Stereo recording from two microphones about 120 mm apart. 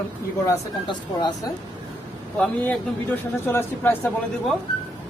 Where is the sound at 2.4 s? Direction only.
15° left (ahead or behind).